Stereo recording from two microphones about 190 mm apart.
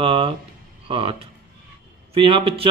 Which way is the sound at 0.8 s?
30° right (ahead or behind).